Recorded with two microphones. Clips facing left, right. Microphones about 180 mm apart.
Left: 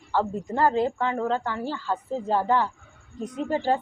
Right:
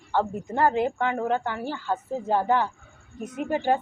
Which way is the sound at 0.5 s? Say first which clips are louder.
Even; 20° right (ahead or behind).